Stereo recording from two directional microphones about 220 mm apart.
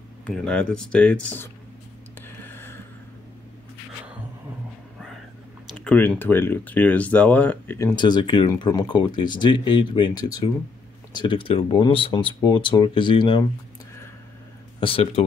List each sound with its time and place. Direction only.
0.2 s speech: 5° left (ahead or behind)
2.2 s a sound: 10° left (ahead or behind)
5.7 s speech: 5° left (ahead or behind)
7.9 s speech: 20° left (ahead or behind)
14.8 s speech: 25° left (ahead or behind)